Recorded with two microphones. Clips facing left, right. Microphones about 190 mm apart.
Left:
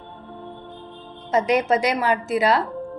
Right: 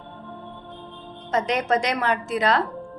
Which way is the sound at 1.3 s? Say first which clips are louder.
Left 3 dB; 10° left (ahead or behind).